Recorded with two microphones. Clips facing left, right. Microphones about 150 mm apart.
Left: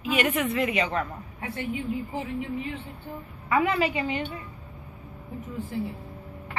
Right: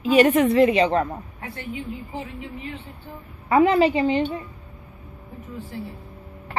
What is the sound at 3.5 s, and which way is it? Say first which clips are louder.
Speech: right 7 dB; 35° right (ahead or behind).